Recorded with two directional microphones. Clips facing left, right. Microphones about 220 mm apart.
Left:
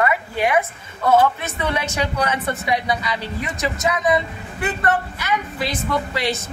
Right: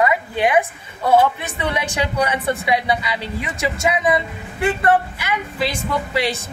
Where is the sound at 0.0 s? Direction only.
15° right (ahead or behind).